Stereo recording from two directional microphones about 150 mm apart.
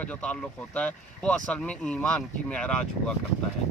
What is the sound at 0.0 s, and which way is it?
Speech, 10° left (ahead or behind).